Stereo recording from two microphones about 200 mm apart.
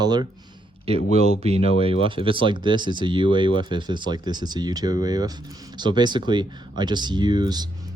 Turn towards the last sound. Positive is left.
turn(degrees=-20)  # may be behind; listen again after turning